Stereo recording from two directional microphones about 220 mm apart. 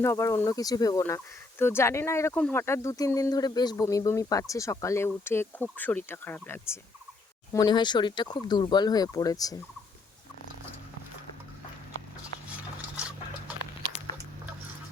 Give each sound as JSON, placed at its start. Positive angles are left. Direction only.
{"t": 0.0, "sound": "speech", "side_deg": 10}